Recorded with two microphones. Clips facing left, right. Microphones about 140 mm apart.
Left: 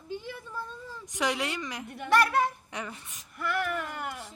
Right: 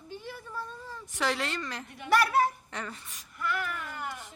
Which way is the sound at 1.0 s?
15° left (ahead or behind).